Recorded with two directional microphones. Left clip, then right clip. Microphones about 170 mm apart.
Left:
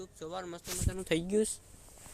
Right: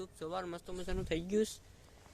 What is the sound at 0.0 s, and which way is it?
Speech, centre (ahead or behind).